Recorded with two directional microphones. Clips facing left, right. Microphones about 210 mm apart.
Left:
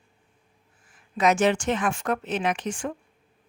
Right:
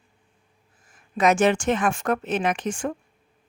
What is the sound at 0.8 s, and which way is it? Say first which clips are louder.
A woman's voice: right 2 dB; 50° right (ahead or behind).